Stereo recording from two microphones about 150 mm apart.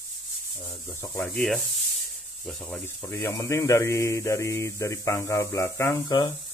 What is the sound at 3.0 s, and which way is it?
Speech, 20° left (ahead or behind).